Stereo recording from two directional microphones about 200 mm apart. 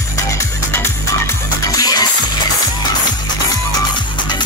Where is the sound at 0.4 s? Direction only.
10° left (ahead or behind).